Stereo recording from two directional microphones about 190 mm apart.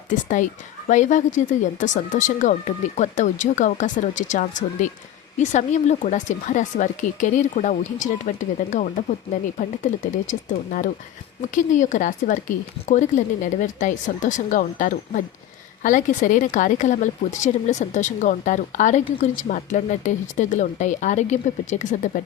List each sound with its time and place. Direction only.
0.1 s speech: 45° left (ahead or behind)